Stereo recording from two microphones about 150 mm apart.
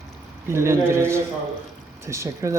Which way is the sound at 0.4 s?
20° right (ahead or behind).